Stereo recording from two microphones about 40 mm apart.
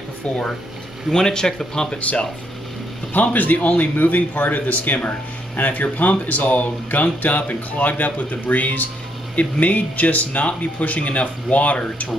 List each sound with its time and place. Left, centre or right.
1.1 s speech: centre
2.0 s speech: left
3.1 s speech: left